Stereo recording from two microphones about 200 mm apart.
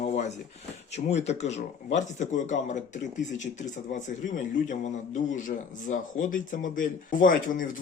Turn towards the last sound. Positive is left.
turn(degrees=45)  # may be behind; listen again after turning